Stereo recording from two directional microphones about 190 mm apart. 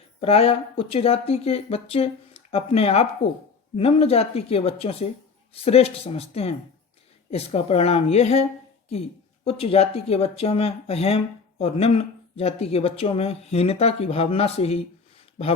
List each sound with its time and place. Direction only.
0.2 s speech: 30° left (ahead or behind)